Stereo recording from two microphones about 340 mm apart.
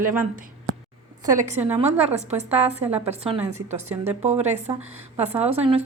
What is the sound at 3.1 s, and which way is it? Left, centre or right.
Speech, centre.